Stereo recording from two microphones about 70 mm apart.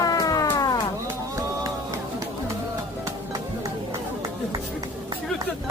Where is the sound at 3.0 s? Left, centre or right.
Right.